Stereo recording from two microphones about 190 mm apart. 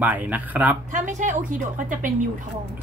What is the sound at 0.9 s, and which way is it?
A woman's voice, 40° right (ahead or behind).